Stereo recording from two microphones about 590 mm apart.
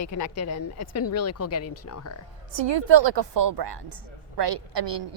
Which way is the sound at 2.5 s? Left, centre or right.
Right.